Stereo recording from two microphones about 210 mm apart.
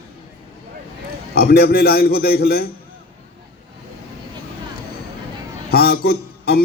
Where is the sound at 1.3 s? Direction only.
45° left (ahead or behind).